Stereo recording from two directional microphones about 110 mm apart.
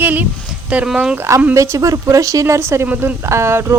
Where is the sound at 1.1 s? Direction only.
25° right (ahead or behind).